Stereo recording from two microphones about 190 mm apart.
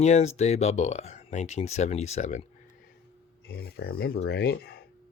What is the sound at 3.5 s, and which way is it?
Speech, 55° left (ahead or behind).